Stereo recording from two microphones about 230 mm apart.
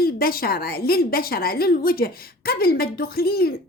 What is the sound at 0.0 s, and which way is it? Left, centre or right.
A woman's voice, left.